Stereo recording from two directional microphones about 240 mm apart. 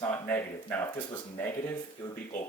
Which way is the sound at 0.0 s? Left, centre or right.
Centre.